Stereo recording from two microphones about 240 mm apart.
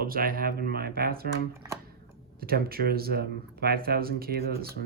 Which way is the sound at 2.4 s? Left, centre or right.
Right.